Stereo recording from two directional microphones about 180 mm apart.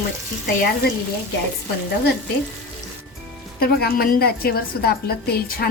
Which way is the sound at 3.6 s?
60° left (ahead or behind).